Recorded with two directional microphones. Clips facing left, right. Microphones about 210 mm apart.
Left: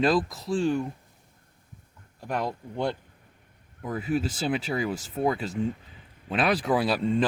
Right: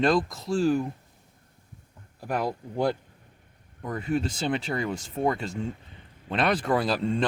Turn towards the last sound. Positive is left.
turn(degrees=0)  # may be behind; listen again after turning